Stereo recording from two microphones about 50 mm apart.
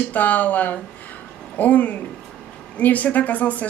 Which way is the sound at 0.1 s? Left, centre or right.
Left.